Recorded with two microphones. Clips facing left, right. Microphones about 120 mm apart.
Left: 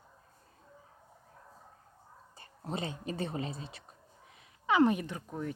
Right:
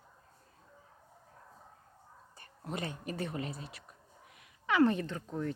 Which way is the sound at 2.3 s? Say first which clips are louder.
Left 2 dB; 25° left (ahead or behind).